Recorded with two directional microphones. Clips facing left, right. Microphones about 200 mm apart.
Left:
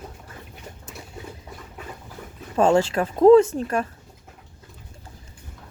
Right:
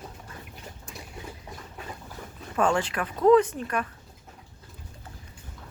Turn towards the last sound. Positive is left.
turn(degrees=30)  # may be behind; listen again after turning